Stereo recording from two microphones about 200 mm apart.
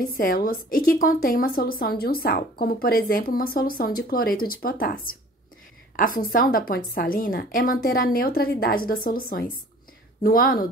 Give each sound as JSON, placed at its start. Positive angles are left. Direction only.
{"t": 0.2, "sound": "a woman's voice", "side_deg": 45}